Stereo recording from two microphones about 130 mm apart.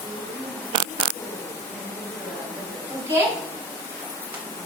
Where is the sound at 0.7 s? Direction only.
40° right (ahead or behind).